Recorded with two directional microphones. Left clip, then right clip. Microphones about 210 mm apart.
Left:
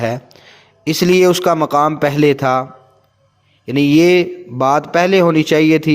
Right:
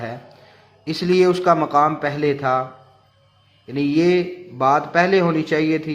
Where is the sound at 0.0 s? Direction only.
40° left (ahead or behind).